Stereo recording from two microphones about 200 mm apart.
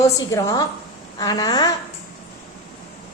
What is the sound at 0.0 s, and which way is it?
A woman's voice, 15° left (ahead or behind).